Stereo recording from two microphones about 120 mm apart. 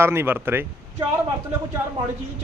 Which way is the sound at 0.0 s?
20° right (ahead or behind).